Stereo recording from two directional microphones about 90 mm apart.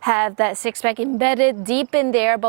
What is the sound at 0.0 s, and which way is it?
A woman's voice, 20° right (ahead or behind).